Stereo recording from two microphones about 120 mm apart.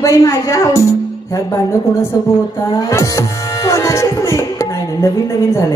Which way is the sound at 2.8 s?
25° left (ahead or behind).